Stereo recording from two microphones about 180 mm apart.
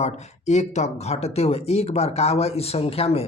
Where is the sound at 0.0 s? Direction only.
40° left (ahead or behind).